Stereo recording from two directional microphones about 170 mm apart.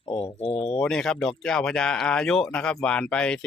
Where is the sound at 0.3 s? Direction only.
35° left (ahead or behind).